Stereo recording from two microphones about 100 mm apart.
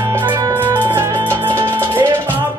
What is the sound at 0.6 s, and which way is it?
Music, 20° right (ahead or behind).